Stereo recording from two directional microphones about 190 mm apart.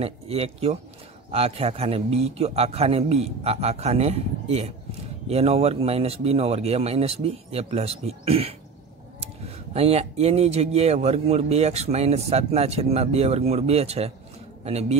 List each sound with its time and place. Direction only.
0.0 s speech: 30° right (ahead or behind)
9.8 s a man's voice: 35° right (ahead or behind)